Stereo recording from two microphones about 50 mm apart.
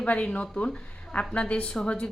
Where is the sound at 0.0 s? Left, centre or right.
Left.